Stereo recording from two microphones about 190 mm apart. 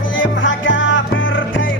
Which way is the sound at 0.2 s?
80° left.